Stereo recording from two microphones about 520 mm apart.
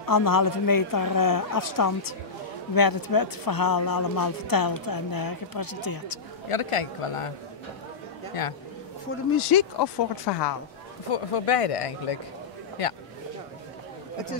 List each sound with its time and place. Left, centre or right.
0.0 s speech: left
6.5 s speech: left
9.4 s speech: left
11.1 s speech: left